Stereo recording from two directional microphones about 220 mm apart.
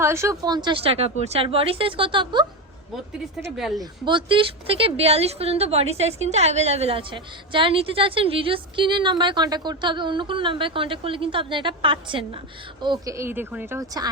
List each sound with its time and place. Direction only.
0.0 s speech: 10° right (ahead or behind)
3.5 s a woman's voice: centre (ahead or behind)
3.8 s speech: 20° right (ahead or behind)